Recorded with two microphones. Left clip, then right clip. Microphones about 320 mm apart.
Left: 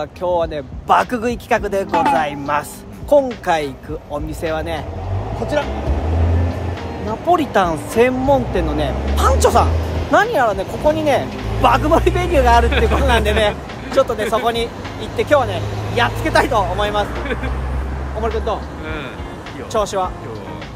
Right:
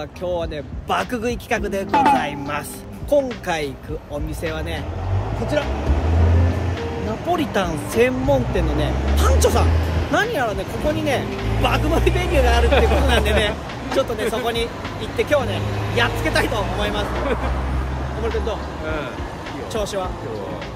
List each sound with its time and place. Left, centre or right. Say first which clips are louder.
0.3 s speech: left 7 dB; centre
1.9 s speech: right 1 dB; centre
2.1 s speech: left 5 dB; centre
7.2 s speech: left 7 dB; centre
19.7 s speech: left 7 dB; centre